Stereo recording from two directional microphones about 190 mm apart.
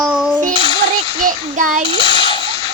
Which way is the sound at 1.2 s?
45° right (ahead or behind).